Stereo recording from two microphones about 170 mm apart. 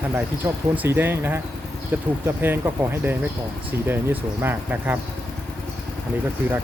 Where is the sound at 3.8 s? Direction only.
10° right (ahead or behind).